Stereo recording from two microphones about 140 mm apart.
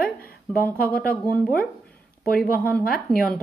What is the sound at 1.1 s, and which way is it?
Speech, 10° left (ahead or behind).